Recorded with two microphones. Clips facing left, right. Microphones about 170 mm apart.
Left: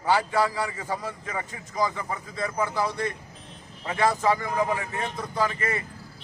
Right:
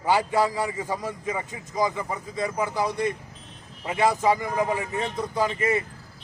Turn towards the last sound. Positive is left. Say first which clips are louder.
# right 3 dB
turn(degrees=-20)  # may be behind; listen again after turning